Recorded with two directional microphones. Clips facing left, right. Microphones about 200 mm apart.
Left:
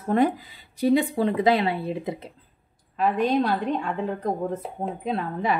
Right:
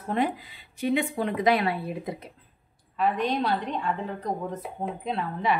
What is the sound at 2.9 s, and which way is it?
Speech, 50° left (ahead or behind).